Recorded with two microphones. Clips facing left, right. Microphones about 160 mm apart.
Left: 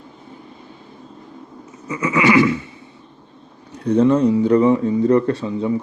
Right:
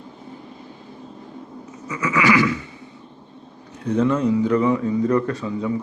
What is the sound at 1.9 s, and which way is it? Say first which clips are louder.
Speech: left 3 dB; 25° left (ahead or behind).